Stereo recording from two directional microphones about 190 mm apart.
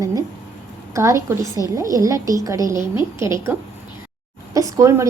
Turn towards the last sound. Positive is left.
turn(degrees=-15)  # may be behind; listen again after turning